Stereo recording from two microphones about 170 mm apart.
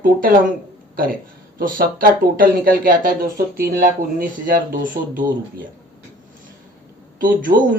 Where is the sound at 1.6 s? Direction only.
55° right (ahead or behind).